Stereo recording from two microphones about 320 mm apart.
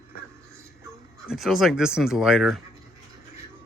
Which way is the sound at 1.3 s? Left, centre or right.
Centre.